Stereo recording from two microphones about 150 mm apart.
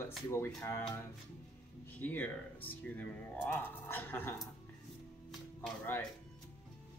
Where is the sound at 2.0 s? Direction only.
10° left (ahead or behind).